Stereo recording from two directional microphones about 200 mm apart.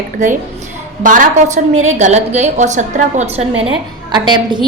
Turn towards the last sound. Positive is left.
turn(degrees=-20)  # may be behind; listen again after turning